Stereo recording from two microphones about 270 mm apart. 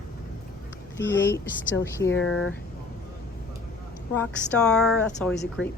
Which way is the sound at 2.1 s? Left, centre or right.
Left.